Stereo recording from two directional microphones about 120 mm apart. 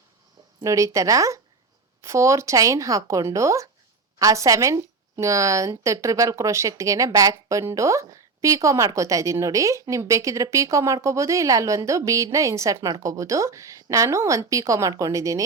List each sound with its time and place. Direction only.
0.6 s a woman's voice: 25° right (ahead or behind)